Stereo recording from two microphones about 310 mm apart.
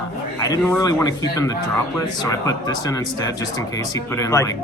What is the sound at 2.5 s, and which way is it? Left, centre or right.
Speech, centre.